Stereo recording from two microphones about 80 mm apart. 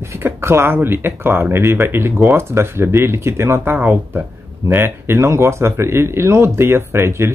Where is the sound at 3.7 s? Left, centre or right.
Right.